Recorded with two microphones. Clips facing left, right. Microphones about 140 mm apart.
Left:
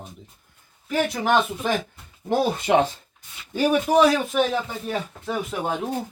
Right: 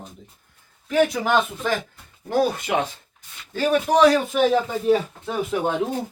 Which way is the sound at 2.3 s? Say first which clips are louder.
Left 1 dB; 25° left (ahead or behind).